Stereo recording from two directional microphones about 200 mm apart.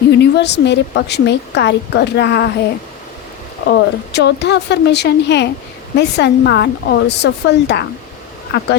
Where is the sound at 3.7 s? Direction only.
55° left (ahead or behind).